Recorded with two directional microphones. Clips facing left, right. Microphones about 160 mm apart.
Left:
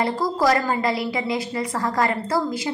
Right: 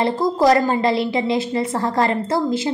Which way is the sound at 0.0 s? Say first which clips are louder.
Right 4 dB; 25° right (ahead or behind).